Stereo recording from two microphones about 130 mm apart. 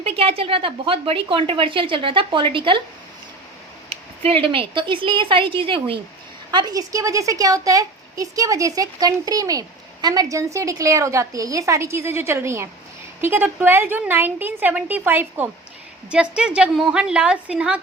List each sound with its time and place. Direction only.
0.0 s a woman's voice: 50° right (ahead or behind)
3.8 s a woman's voice: 50° right (ahead or behind)
6.5 s a woman's voice: 30° right (ahead or behind); by 17.7 s 10° right (ahead or behind)